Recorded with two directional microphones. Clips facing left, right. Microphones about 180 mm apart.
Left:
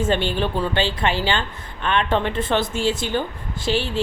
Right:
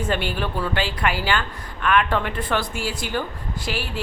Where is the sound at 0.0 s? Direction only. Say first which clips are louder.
Left 4 dB; 25° left (ahead or behind).